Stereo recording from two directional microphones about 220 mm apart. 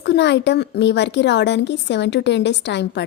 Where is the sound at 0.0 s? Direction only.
50° left (ahead or behind).